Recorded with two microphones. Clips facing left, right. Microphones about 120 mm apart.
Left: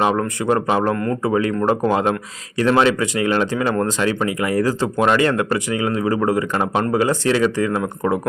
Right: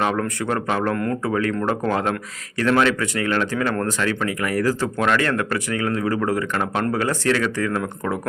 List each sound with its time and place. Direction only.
0.0 s speech: 15° left (ahead or behind)